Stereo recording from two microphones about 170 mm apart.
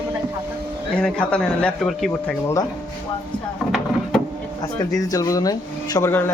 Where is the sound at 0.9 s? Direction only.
5° left (ahead or behind).